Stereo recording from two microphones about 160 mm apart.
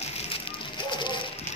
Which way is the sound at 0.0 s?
40° left (ahead or behind).